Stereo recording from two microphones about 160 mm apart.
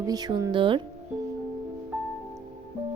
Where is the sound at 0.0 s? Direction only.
25° right (ahead or behind).